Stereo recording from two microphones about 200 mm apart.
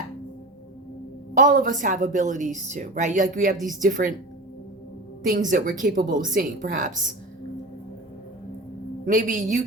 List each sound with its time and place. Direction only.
1.3 s a woman's voice: 40° right (ahead or behind)
5.2 s a woman's voice: 40° right (ahead or behind)
9.0 s a woman's voice: 40° right (ahead or behind)